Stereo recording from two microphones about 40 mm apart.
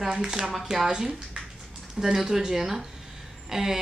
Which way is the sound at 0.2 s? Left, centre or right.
Centre.